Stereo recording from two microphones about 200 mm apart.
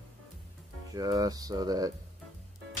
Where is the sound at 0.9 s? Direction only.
20° right (ahead or behind).